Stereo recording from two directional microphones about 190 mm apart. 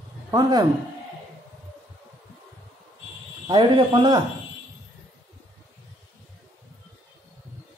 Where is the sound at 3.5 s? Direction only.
25° right (ahead or behind).